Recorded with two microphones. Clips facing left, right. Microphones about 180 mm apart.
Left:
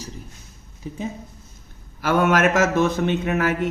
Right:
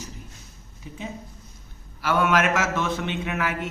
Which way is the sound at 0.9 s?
35° left (ahead or behind).